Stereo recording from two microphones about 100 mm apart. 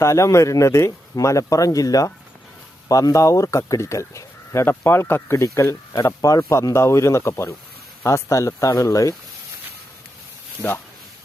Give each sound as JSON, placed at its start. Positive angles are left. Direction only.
{"t": 0.0, "sound": "speech", "side_deg": 30}